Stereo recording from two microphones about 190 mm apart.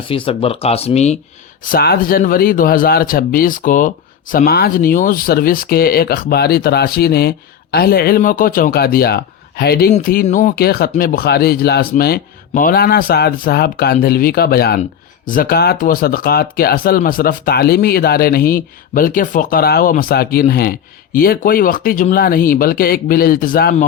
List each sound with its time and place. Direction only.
0.1 s speech: 30° left (ahead or behind)
1.6 s speech: 50° left (ahead or behind)